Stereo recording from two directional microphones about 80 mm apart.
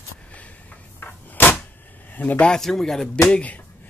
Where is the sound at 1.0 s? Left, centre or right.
Left.